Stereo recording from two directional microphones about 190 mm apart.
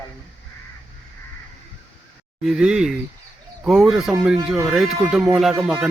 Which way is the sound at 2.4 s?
Centre (ahead or behind).